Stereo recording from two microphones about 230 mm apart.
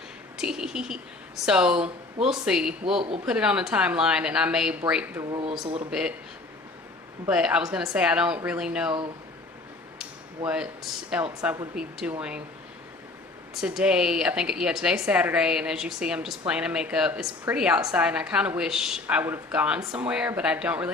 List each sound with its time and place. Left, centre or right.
0.3 s speech: centre
5.3 s speech: right
5.9 s speech: centre
7.3 s speech: centre
10.0 s a sound: centre
11.3 s speech: centre
13.5 s speech: centre